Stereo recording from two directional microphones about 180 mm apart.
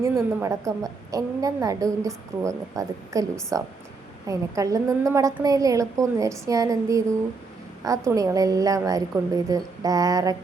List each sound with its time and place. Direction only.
0.0 s a woman's voice: 15° right (ahead or behind)